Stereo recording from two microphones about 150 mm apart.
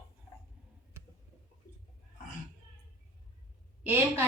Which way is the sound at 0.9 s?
15° right (ahead or behind).